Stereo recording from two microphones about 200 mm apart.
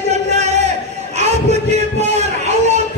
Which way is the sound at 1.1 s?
35° right (ahead or behind).